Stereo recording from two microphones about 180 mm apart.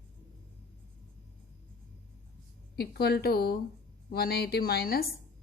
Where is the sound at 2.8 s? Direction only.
60° left (ahead or behind).